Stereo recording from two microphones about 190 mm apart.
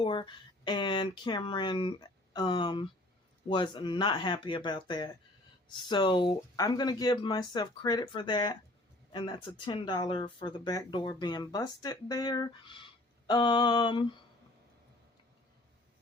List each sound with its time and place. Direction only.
0.0 s speech: 25° left (ahead or behind)